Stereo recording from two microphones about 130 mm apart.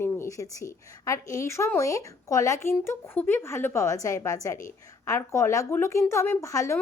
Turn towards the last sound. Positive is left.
turn(degrees=25)  # may be behind; listen again after turning